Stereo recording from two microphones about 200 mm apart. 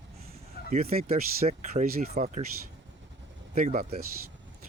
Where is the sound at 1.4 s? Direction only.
35° right (ahead or behind).